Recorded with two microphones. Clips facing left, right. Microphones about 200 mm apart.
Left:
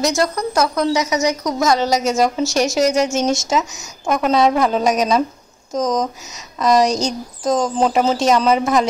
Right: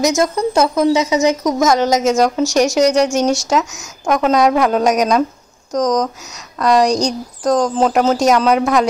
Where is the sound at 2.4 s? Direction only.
15° right (ahead or behind).